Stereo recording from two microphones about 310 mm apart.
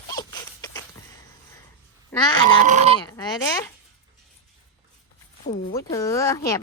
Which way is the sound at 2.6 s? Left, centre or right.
Right.